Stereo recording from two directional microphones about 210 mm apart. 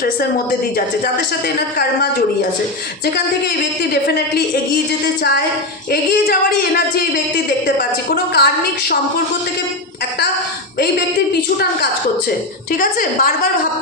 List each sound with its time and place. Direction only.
1.5 s a man's voice: 50° left (ahead or behind)
3.9 s a man's voice: 45° left (ahead or behind)
5.9 s a man's voice: 45° left (ahead or behind)
7.8 s a man's voice: 50° left (ahead or behind)
12.7 s a woman's voice: 40° left (ahead or behind)